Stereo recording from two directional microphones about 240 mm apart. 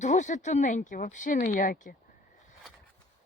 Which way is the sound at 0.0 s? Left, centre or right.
Left.